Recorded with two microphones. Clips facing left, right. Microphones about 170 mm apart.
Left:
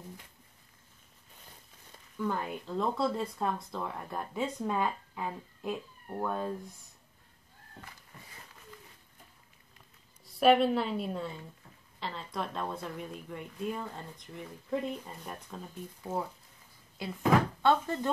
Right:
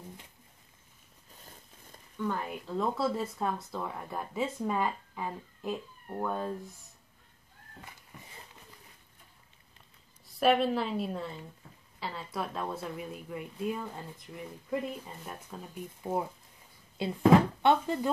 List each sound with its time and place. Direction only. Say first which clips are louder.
2.1 s speech: even; 5° left (ahead or behind)
10.2 s speech: left 2 dB; centre (ahead or behind)
17.0 s speech: right 5 dB; 25° right (ahead or behind)
17.6 s speech: right 1 dB; 15° right (ahead or behind)